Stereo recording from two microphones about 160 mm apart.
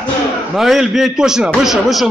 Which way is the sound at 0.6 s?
Centre (ahead or behind).